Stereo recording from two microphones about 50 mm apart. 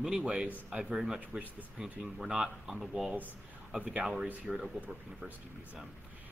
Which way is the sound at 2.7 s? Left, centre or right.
Centre.